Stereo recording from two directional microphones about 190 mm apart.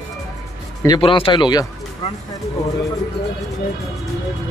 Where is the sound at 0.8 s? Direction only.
25° left (ahead or behind).